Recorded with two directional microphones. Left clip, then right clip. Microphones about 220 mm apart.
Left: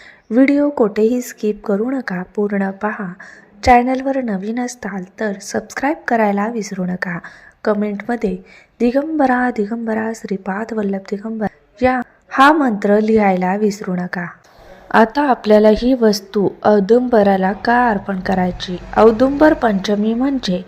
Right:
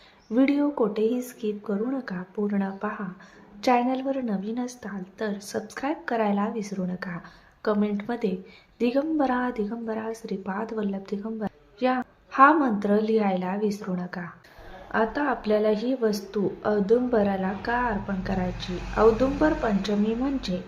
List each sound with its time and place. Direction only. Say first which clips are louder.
0.3 s a woman's voice: left 10 dB; 25° left (ahead or behind)